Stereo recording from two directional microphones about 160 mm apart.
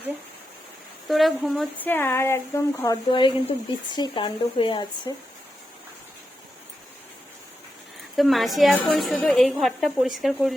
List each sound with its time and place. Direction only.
1.0 s speech: centre (ahead or behind)
1.8 s speech: 15° left (ahead or behind); by 5.1 s 30° left (ahead or behind)
8.1 s speech: centre (ahead or behind)